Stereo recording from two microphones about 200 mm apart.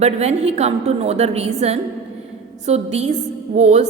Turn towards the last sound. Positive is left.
turn(degrees=-35)  # may be behind; listen again after turning